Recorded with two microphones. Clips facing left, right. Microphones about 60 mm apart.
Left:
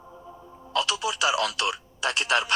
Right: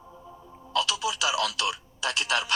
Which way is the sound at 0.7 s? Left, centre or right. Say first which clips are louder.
Left 1 dB; left.